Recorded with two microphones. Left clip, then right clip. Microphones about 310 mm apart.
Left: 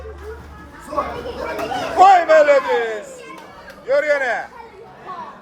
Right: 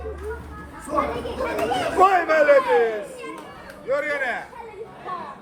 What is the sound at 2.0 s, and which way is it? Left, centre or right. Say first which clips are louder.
Speech: left 7 dB; centre.